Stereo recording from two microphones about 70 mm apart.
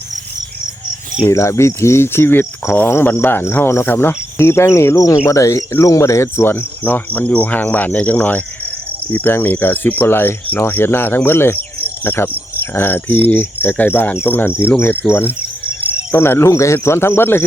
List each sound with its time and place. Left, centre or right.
1.3 s cricket: left
5.1 s speech: left
6.2 s speech: left
9.1 s cricket: left
12.7 s speech: left
14.6 s cricket: left